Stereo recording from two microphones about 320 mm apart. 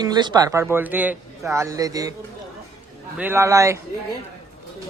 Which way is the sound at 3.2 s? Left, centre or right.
Centre.